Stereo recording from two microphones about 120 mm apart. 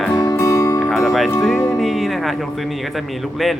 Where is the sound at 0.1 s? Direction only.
25° left (ahead or behind).